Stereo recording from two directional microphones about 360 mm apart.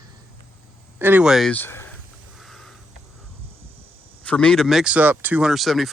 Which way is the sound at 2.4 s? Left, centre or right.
Centre.